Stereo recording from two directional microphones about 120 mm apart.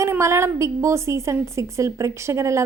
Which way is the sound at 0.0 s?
25° right (ahead or behind).